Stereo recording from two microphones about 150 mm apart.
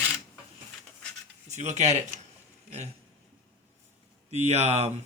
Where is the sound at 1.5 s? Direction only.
50° right (ahead or behind).